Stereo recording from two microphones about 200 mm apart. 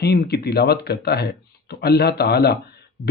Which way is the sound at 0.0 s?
55° left (ahead or behind).